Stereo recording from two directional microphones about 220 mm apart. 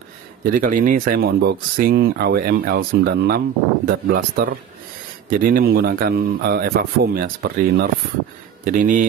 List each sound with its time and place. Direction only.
0.4 s speech: 40° right (ahead or behind)